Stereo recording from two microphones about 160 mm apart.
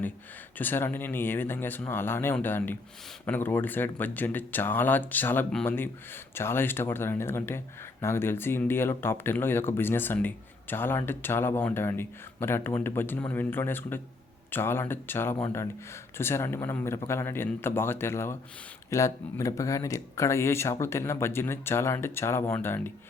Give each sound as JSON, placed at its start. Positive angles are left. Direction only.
{"t": 0.6, "sound": "speech", "side_deg": 15}